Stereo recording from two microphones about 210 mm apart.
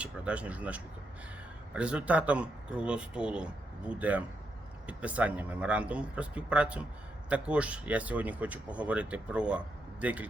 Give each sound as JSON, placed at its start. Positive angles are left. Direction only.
{"t": 0.0, "sound": "speech", "side_deg": -5}